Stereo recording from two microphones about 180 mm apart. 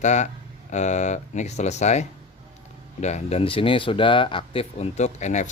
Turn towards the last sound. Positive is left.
turn(degrees=40)  # may be behind; listen again after turning